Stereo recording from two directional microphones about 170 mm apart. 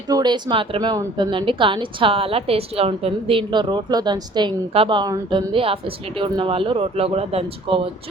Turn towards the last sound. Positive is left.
turn(degrees=-30)  # may be behind; listen again after turning